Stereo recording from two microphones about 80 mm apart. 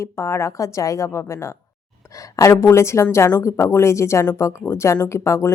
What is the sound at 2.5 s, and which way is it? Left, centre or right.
Speech, left.